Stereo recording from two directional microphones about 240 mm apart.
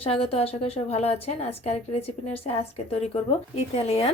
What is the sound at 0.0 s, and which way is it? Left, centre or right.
Speech, left.